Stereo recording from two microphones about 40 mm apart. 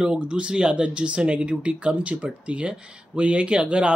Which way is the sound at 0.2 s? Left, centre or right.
Right.